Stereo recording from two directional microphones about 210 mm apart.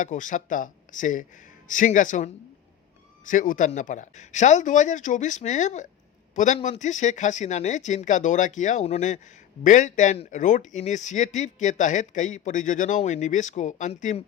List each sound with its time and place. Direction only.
0.0 s speech: 40° left (ahead or behind)